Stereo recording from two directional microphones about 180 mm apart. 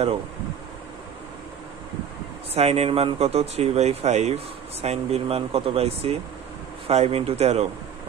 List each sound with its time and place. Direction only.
2.5 s speech: 35° right (ahead or behind)